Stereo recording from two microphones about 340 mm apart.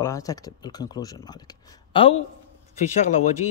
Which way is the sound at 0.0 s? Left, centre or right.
Centre.